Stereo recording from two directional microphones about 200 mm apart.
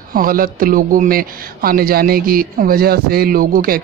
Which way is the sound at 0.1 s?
45° right (ahead or behind).